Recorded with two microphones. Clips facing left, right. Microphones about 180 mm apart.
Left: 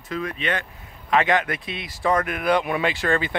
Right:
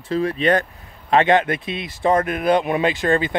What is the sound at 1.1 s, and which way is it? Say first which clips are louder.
Speech: right 5 dB; 30° right (ahead or behind).